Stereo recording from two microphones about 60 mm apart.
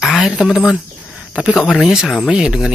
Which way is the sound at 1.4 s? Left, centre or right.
Centre.